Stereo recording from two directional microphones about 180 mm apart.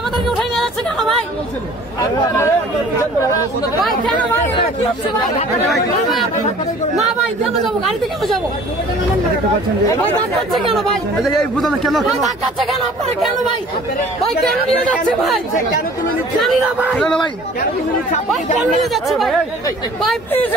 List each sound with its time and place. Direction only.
0.4 s speech: centre (ahead or behind)
2.0 s speech: 15° left (ahead or behind)
10.8 s speech: centre (ahead or behind)
14.9 s speech: 5° left (ahead or behind)
18.6 s speech: centre (ahead or behind)